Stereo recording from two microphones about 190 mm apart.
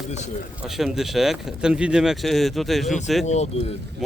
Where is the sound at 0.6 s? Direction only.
Centre (ahead or behind).